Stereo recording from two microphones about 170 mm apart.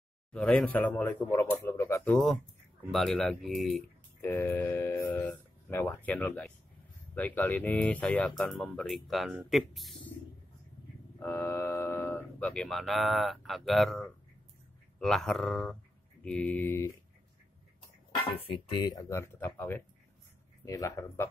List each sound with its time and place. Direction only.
0.3 s speech: 5° left (ahead or behind)
2.9 s speech: centre (ahead or behind)
4.2 s speech: 15° left (ahead or behind)
11.1 s speech: 15° left (ahead or behind)
18.4 s speech: 30° left (ahead or behind)